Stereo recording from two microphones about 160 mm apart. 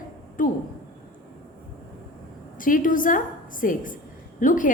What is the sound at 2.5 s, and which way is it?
A woman's voice, 55° left (ahead or behind).